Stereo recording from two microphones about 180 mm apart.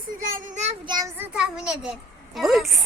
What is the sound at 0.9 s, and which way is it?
Speech, 20° right (ahead or behind).